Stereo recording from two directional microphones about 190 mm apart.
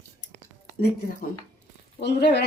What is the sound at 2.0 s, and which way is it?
Speech, 65° left (ahead or behind).